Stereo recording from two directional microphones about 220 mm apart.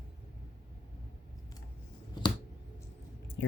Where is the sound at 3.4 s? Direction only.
55° left (ahead or behind).